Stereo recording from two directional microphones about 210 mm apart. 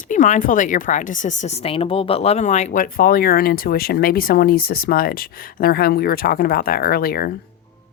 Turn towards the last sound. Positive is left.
turn(degrees=45)  # may be behind; listen again after turning